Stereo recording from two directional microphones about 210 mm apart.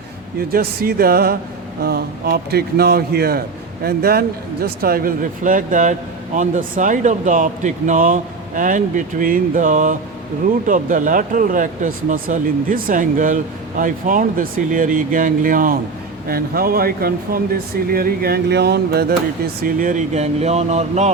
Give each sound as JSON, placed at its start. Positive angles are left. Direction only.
{"t": 0.5, "sound": "speech", "side_deg": -45}